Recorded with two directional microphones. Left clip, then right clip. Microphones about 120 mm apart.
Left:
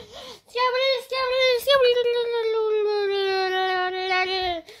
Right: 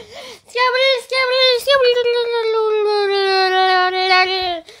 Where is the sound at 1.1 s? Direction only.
30° right (ahead or behind).